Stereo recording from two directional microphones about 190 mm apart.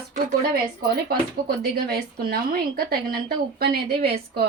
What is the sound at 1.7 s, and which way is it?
A woman's voice, 50° right (ahead or behind).